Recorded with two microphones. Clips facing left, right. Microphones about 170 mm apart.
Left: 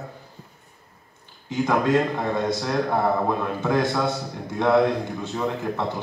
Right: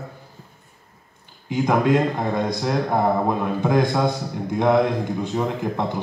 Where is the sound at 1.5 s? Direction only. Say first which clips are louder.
Right 2 dB; 15° right (ahead or behind).